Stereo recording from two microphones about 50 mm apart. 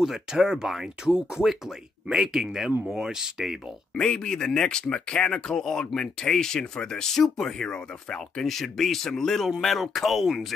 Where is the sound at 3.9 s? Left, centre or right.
Centre.